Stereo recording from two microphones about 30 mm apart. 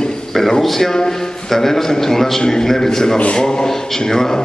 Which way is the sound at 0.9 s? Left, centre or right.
Centre.